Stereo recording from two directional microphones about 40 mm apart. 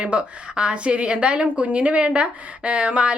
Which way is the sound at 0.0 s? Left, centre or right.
Right.